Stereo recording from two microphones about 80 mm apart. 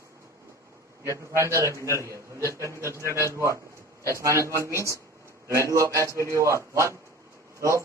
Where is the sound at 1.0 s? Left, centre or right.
Right.